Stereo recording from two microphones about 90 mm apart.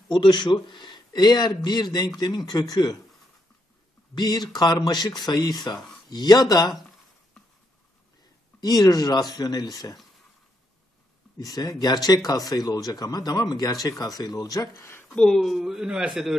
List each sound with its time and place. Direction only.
0.1 s a man's voice: 60° left (ahead or behind)
4.1 s a man's voice: 55° left (ahead or behind)
8.5 s a man's voice: 45° left (ahead or behind)
11.3 s a man's voice: 45° left (ahead or behind)
15.1 s speech: 5° left (ahead or behind)